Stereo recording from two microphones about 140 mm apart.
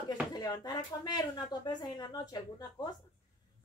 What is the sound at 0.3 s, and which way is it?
Speech, 30° left (ahead or behind).